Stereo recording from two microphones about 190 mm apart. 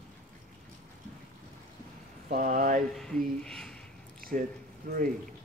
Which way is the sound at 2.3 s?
45° right (ahead or behind).